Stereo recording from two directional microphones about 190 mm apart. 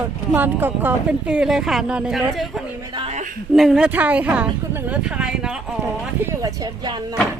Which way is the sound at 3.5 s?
Centre (ahead or behind).